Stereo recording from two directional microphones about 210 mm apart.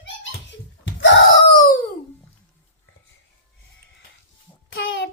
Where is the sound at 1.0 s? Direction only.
60° left (ahead or behind).